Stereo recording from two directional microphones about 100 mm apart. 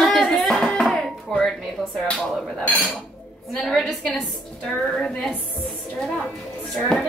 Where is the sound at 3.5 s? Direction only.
5° left (ahead or behind).